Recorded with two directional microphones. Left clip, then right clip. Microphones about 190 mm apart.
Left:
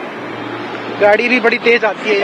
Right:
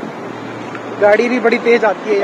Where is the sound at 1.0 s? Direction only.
5° right (ahead or behind).